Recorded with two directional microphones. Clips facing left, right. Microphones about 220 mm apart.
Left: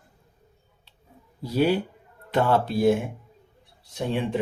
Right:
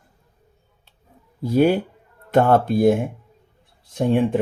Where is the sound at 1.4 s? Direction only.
50° right (ahead or behind).